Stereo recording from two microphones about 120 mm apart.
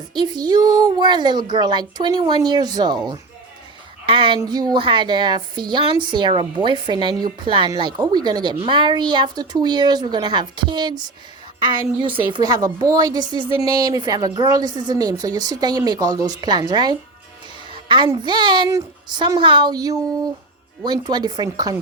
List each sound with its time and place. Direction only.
0.1 s a woman's voice: 35° right (ahead or behind)
4.0 s a woman's voice: 45° right (ahead or behind)
4.4 s a woman's voice: 35° right (ahead or behind)
17.7 s music: 45° right (ahead or behind)
18.2 s a woman's voice: 40° right (ahead or behind)